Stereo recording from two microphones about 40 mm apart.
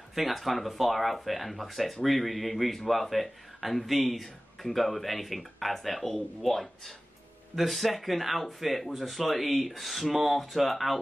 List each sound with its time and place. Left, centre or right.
0.1 s speech: centre